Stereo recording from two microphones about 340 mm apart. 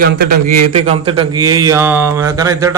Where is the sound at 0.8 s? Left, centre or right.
Centre.